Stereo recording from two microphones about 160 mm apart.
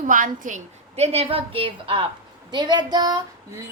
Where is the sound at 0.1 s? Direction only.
55° right (ahead or behind).